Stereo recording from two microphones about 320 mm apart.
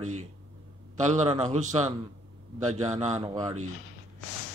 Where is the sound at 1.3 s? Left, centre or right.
Right.